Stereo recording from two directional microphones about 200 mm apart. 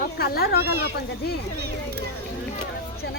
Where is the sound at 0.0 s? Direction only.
50° left (ahead or behind).